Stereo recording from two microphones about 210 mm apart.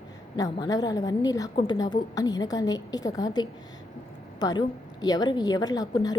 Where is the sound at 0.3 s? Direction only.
20° left (ahead or behind).